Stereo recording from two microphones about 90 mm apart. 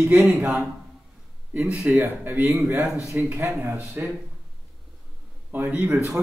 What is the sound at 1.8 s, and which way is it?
Speech, 25° right (ahead or behind).